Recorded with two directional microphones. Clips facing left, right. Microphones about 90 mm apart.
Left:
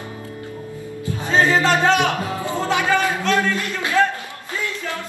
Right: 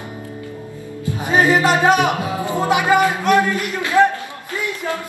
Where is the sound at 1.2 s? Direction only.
15° right (ahead or behind).